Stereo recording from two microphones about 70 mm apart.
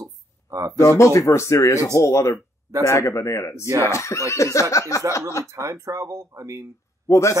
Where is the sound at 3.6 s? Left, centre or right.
Right.